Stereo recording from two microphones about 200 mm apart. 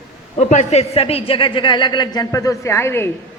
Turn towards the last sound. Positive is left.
turn(degrees=10)  # may be behind; listen again after turning